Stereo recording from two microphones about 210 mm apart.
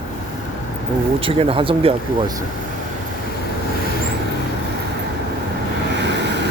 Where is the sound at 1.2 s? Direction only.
25° right (ahead or behind).